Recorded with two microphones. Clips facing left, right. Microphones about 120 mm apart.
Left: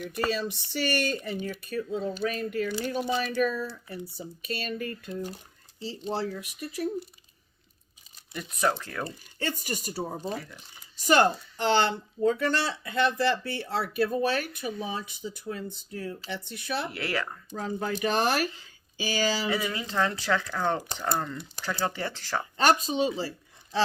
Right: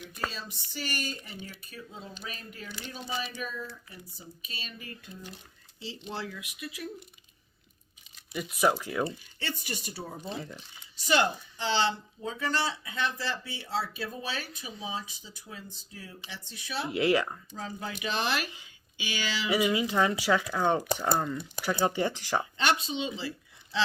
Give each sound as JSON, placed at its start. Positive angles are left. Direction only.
{"t": 0.3, "sound": "speech", "side_deg": 75}
{"t": 5.8, "sound": "speech", "side_deg": 40}
{"t": 8.3, "sound": "speech", "side_deg": -5}
{"t": 9.0, "sound": "speech", "side_deg": 45}
{"t": 10.3, "sound": "speech", "side_deg": -20}
{"t": 10.9, "sound": "speech", "side_deg": 45}
{"t": 16.9, "sound": "speech", "side_deg": -15}
{"t": 17.5, "sound": "speech", "side_deg": 55}
{"t": 19.5, "sound": "speech", "side_deg": -15}
{"t": 22.5, "sound": "speech", "side_deg": 40}
{"t": 23.7, "sound": "a sound", "side_deg": 40}